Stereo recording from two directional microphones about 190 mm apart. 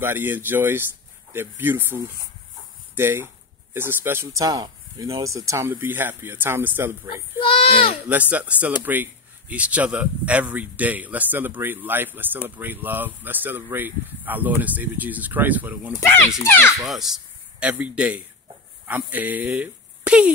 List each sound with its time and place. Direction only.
0.0 s speech: 10° right (ahead or behind)
3.0 s speech: 10° right (ahead or behind)
7.3 s speech: 30° left (ahead or behind)
8.1 s speech: 10° right (ahead or behind)
16.0 s speech: 10° left (ahead or behind)
16.8 s speech: centre (ahead or behind)